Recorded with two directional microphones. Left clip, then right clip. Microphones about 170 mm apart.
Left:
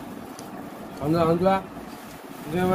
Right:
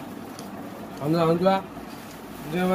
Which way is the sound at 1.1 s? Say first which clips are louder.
Even; centre (ahead or behind).